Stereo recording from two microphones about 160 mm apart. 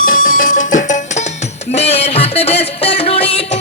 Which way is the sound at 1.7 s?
40° left (ahead or behind).